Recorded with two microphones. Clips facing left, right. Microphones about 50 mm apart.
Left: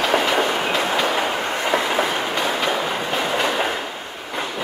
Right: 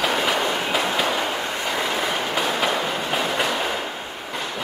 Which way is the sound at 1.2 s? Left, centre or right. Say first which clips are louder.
Left 3 dB; left.